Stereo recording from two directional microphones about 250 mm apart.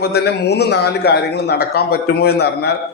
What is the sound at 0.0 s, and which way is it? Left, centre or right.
A man's voice, left.